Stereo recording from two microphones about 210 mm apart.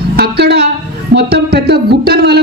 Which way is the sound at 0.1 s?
50° right (ahead or behind).